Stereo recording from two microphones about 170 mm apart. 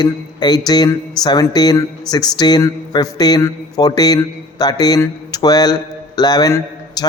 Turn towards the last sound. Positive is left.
turn(degrees=20)  # may be behind; listen again after turning